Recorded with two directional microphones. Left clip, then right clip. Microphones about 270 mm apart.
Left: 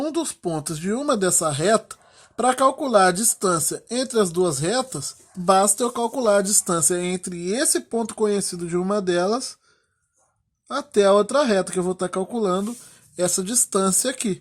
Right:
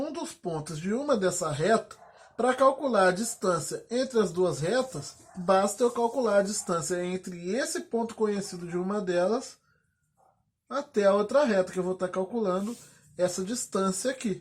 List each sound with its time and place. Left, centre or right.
0.0 s speech: left
10.7 s speech: left